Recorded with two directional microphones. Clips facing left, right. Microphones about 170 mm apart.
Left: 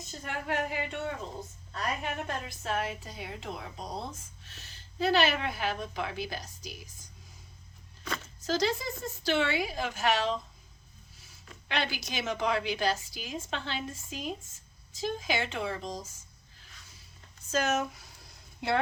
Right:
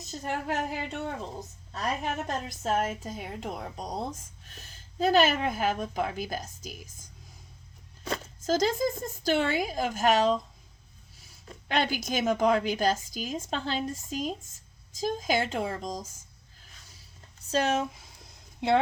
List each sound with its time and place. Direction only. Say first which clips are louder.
0.0 s a woman's voice: right 5 dB; 40° right (ahead or behind)
8.4 s a woman's voice: right 4 dB; 45° right (ahead or behind)
11.4 s a woman's voice: right 5 dB; 45° right (ahead or behind)
17.5 s a woman's voice: right 2 dB; 30° right (ahead or behind)